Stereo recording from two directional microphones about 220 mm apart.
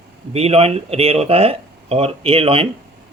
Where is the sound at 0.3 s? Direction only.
25° right (ahead or behind).